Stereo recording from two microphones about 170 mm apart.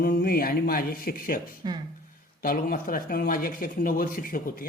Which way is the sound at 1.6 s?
25° right (ahead or behind).